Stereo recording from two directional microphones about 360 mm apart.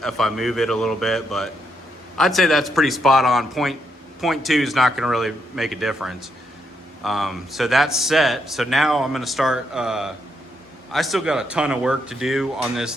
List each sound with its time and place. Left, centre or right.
0.0 s speech: centre